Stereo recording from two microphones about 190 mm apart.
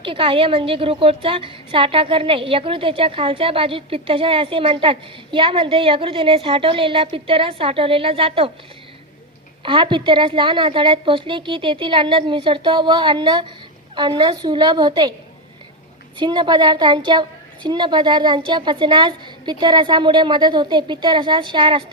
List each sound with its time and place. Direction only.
0.0 s a woman's voice: 25° right (ahead or behind)
9.6 s a woman's voice: 25° right (ahead or behind)
16.1 s a woman's voice: 25° right (ahead or behind)